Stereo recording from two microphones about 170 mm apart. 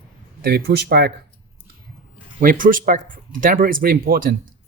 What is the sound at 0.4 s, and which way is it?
Speech, 70° right (ahead or behind).